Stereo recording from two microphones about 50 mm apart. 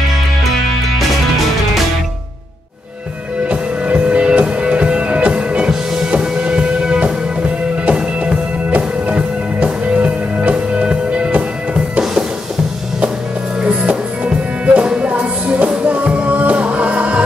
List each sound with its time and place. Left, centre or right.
3.4 s music: right
12.0 s music: centre
13.7 s music: right